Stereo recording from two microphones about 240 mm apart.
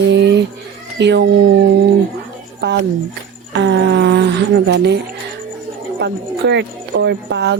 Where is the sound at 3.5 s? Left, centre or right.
Right.